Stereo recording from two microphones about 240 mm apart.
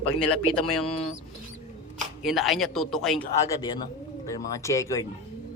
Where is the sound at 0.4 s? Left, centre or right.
Left.